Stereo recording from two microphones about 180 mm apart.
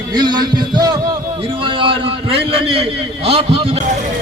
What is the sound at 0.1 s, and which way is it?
Music, 25° right (ahead or behind).